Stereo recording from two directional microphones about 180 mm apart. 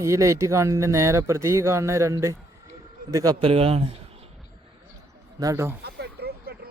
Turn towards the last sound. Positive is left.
turn(degrees=-60)  # may be behind; listen again after turning